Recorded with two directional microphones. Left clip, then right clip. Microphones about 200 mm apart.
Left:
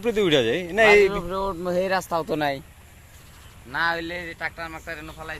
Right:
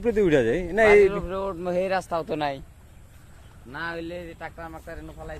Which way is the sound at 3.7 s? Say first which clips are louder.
Left 7 dB; 25° left (ahead or behind).